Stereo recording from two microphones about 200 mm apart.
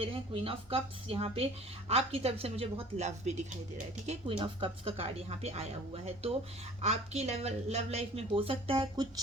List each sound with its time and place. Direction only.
0.0 s a woman's voice: 25° right (ahead or behind)